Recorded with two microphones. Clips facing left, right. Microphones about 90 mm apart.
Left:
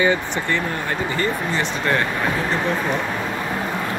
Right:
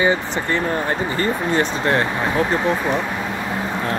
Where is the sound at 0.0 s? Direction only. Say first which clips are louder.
Right 1 dB; 30° right (ahead or behind).